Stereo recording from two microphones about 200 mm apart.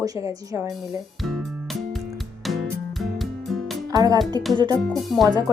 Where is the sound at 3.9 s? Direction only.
20° right (ahead or behind).